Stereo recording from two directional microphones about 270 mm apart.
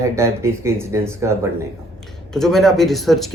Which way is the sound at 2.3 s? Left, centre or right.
Centre.